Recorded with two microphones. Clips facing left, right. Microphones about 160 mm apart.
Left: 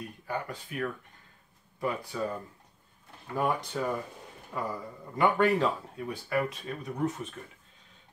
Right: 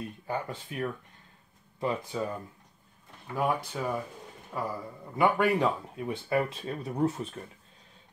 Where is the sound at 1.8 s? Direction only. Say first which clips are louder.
Right 2 dB; 20° right (ahead or behind).